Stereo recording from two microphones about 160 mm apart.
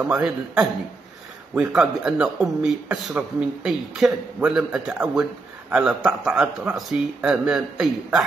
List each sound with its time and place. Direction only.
0.0 s speech: 5° right (ahead or behind)